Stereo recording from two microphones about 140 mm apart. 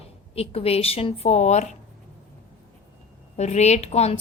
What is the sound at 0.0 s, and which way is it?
Speech, 45° left (ahead or behind).